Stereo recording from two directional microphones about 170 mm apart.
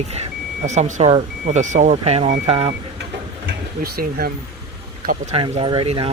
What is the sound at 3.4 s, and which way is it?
Speech, 60° right (ahead or behind).